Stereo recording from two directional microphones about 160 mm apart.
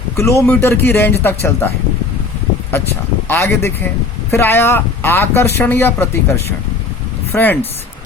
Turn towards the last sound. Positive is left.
turn(degrees=10)  # may be behind; listen again after turning